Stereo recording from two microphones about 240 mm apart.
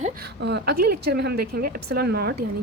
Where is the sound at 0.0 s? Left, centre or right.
Right.